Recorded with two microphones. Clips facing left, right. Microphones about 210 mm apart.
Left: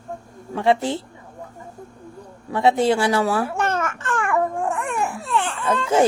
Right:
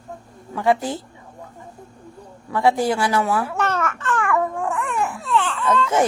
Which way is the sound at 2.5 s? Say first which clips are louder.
Left 1 dB; 25° left (ahead or behind).